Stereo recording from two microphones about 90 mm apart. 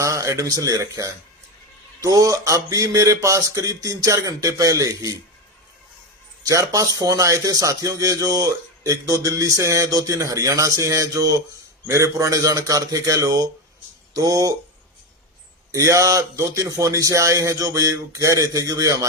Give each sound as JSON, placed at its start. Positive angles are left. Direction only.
{"t": 0.0, "sound": "speech", "side_deg": -35}
{"t": 6.4, "sound": "speech", "side_deg": -40}
{"t": 15.7, "sound": "speech", "side_deg": -35}